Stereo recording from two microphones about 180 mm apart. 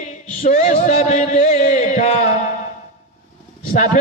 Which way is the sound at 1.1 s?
40° left (ahead or behind).